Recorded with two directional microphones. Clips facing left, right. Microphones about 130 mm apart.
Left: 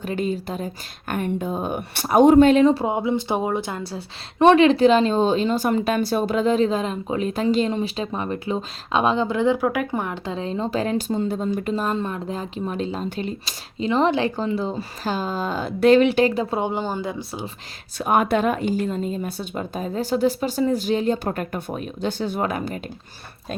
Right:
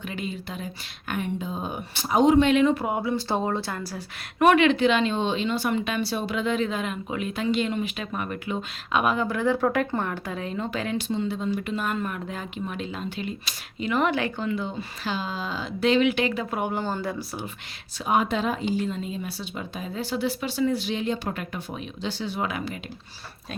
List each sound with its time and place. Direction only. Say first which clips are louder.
0.0 s speech: left 8 dB; 40° left (ahead or behind)
2.5 s a woman's voice: left 5 dB; 35° left (ahead or behind)
9.6 s speech: left 1 dB; 10° left (ahead or behind)
10.2 s a woman's voice: left 4 dB; 25° left (ahead or behind); by 16.0 s 50° left (ahead or behind)
16.0 s speech: left 5 dB; 35° left (ahead or behind); by 17.4 s 20° left (ahead or behind)
17.9 s speech: left 4 dB; 55° left (ahead or behind)